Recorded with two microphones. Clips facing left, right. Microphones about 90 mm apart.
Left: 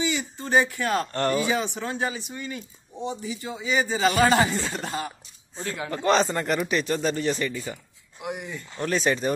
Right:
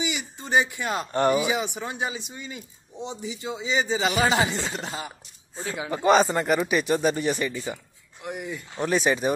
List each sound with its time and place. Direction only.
0.0 s speech: 15° right (ahead or behind)
8.2 s speech: centre (ahead or behind)